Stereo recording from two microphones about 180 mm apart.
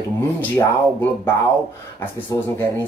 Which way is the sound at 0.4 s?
10° left (ahead or behind).